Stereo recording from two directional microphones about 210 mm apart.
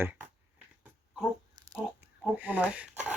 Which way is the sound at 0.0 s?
10° right (ahead or behind).